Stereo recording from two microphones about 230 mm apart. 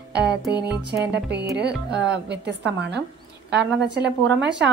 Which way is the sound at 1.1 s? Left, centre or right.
Right.